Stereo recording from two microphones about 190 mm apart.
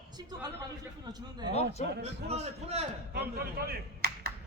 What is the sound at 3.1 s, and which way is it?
Clapping, 55° right (ahead or behind).